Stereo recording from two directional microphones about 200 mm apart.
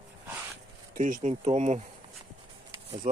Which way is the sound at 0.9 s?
40° right (ahead or behind).